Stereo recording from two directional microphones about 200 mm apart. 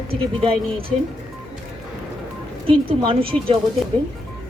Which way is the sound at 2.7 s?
25° right (ahead or behind).